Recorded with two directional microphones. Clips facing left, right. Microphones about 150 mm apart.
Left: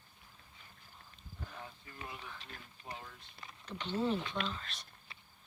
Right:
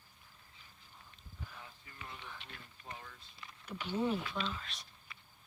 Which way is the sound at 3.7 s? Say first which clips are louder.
Even; 10° right (ahead or behind).